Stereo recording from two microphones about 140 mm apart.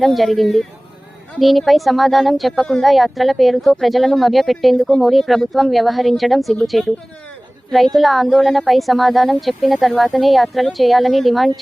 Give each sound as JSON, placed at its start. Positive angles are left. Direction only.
{"t": 0.0, "sound": "speech", "side_deg": 0}